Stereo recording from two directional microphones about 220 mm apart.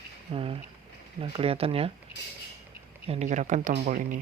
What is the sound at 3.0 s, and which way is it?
Speech, 30° right (ahead or behind).